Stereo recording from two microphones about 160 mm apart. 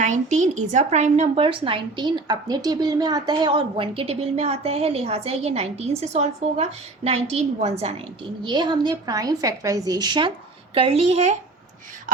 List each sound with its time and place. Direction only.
0.0 s speech: 50° right (ahead or behind)
8.4 s a woman's voice: 30° right (ahead or behind)